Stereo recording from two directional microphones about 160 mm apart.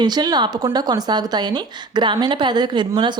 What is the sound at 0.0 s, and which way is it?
A woman's voice, 25° right (ahead or behind).